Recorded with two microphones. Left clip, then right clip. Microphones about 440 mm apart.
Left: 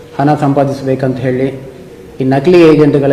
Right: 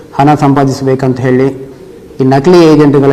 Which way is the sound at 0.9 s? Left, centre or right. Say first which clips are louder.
Right 4 dB; right.